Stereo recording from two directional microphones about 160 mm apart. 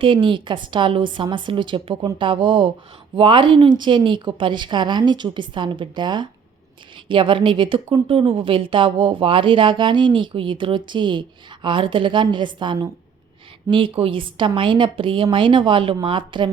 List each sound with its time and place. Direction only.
0.0 s a woman's voice: 30° right (ahead or behind)